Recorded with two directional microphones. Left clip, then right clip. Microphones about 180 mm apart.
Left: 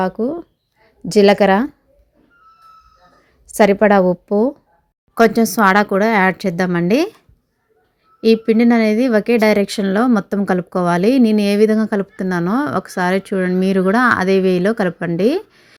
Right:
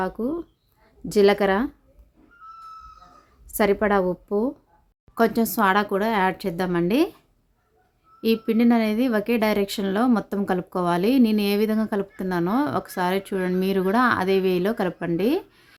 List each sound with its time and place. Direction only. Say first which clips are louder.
0.0 s speech: left 7 dB; 25° left (ahead or behind)
3.5 s speech: left 9 dB; 30° left (ahead or behind)
8.2 s speech: left 8 dB; 25° left (ahead or behind)